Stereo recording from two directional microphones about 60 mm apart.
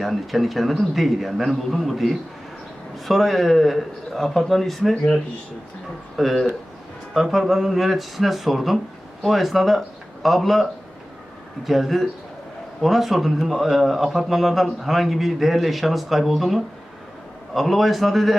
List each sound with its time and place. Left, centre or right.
0.0 s speech: centre
6.1 s speech: centre